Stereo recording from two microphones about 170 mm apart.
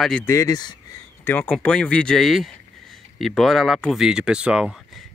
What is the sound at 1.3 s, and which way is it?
Speech, 10° left (ahead or behind).